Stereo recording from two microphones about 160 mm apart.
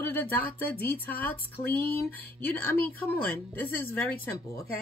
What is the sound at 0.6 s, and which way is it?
Speech, 10° left (ahead or behind).